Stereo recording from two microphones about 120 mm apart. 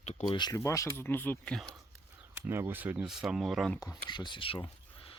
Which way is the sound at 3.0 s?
5° right (ahead or behind).